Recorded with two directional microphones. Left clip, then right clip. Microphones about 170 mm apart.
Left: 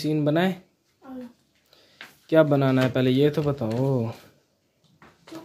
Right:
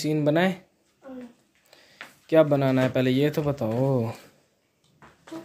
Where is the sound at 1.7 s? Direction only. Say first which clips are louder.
Right 1 dB; centre (ahead or behind).